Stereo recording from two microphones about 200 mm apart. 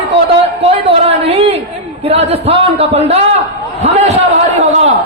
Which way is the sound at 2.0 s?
30° right (ahead or behind).